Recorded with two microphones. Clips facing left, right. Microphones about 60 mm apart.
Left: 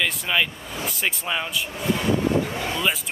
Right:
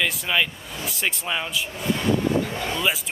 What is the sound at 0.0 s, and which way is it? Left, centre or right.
Speech, centre.